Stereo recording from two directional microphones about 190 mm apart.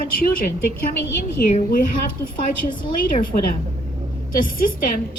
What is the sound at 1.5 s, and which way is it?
Speech, 45° left (ahead or behind).